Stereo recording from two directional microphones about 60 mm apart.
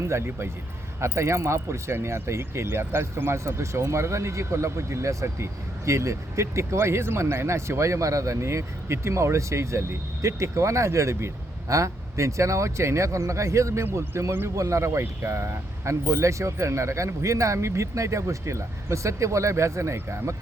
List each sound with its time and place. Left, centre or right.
0.0 s speech: right
14.1 s speech: right
14.5 s speech: right